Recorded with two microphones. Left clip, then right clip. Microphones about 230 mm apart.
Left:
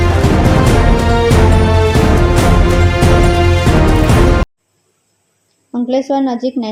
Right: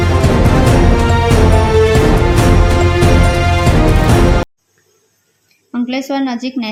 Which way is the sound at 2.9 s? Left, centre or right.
Centre.